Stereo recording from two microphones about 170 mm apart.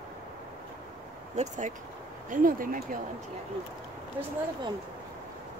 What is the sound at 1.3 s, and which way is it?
Speech, 45° right (ahead or behind).